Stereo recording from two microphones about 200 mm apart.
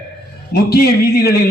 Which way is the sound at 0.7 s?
50° left (ahead or behind).